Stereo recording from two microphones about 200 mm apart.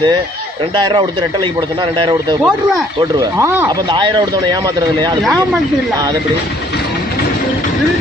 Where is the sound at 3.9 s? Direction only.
20° right (ahead or behind).